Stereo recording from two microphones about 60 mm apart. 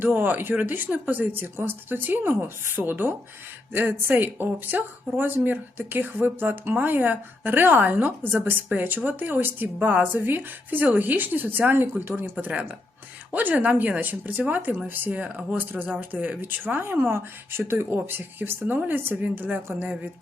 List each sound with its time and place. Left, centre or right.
0.0 s speech: right
12.5 s speech: right
16.4 s speech: right